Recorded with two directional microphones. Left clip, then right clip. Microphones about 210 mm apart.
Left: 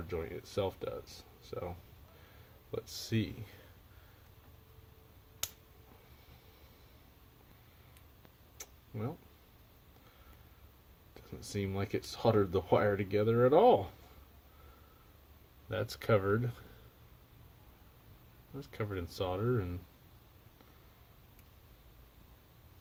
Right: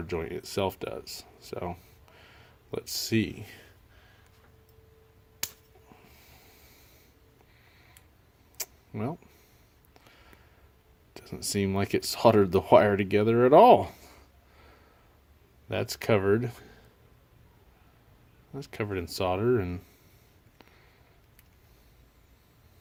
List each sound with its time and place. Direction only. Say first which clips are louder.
0.1 s speech: right 6 dB; 40° right (ahead or behind)
2.7 s speech: right 9 dB; 35° right (ahead or behind)
8.5 s a sound: right 8 dB; 40° right (ahead or behind)
11.1 s speech: right 10 dB; 40° right (ahead or behind)
15.7 s speech: right 5 dB; 30° right (ahead or behind)
18.6 s speech: right 7 dB; 30° right (ahead or behind)